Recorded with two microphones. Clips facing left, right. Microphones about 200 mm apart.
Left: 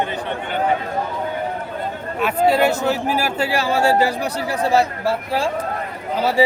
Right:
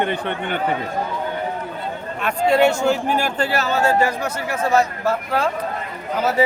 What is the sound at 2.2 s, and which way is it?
A man's voice, 5° left (ahead or behind).